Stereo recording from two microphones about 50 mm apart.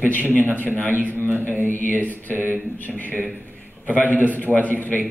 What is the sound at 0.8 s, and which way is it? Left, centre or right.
Speech, left.